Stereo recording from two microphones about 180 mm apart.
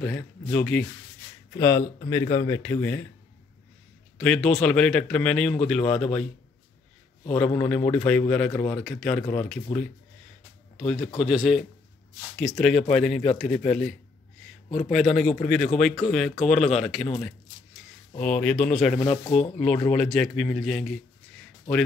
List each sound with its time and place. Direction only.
0.0 s speech: 10° left (ahead or behind)
4.2 s speech: 5° left (ahead or behind)
7.2 s speech: 5° left (ahead or behind)
12.7 s speech: 40° left (ahead or behind)
13.4 s speech: 5° left (ahead or behind)
18.1 s speech: 5° left (ahead or behind)
19.0 s speech: 30° left (ahead or behind)
19.9 s speech: 5° left (ahead or behind)